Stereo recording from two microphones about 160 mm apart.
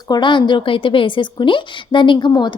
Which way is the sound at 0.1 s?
30° left (ahead or behind).